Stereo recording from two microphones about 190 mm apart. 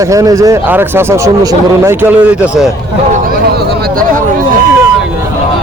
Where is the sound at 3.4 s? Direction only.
55° right (ahead or behind).